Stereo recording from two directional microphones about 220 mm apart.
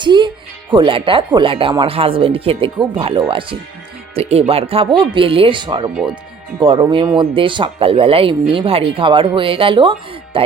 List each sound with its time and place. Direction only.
0.0 s music: 20° right (ahead or behind)
0.7 s speech: 20° right (ahead or behind)